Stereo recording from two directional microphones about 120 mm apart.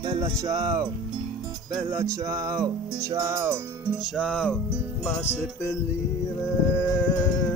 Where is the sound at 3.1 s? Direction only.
20° right (ahead or behind).